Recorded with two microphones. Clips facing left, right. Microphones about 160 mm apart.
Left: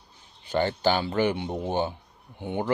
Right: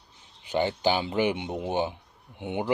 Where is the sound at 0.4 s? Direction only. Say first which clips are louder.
Left 1 dB; 15° right (ahead or behind).